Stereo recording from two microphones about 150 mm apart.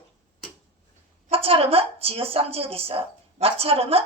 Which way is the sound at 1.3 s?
40° right (ahead or behind).